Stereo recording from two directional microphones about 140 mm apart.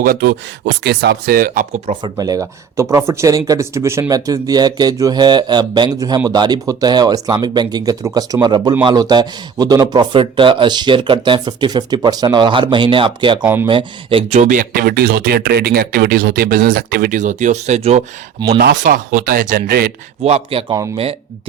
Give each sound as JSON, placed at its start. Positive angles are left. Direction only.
{"t": 0.0, "sound": "speech", "side_deg": -90}
{"t": 1.9, "sound": "speech", "side_deg": -40}
{"t": 2.1, "sound": "a man's voice", "side_deg": -25}
{"t": 13.4, "sound": "speech", "side_deg": -15}
{"t": 13.7, "sound": "speech", "side_deg": -40}
{"t": 18.7, "sound": "speech", "side_deg": -80}
{"t": 20.2, "sound": "speech", "side_deg": -45}